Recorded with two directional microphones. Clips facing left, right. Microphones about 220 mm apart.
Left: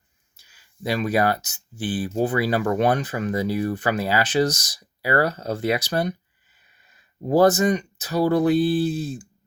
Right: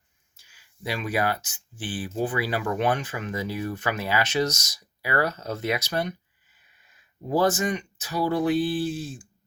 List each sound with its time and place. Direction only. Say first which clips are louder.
0.3 s speech: left 6 dB; 40° left (ahead or behind)
7.3 s speech: left 6 dB; 40° left (ahead or behind)